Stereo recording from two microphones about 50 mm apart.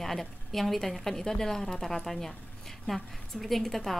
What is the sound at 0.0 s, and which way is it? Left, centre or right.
A woman's voice, centre.